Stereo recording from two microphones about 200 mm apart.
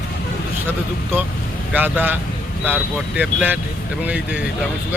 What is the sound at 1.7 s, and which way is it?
Speech, 10° right (ahead or behind).